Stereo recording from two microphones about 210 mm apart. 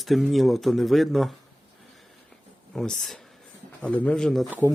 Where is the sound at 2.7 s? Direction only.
Centre (ahead or behind).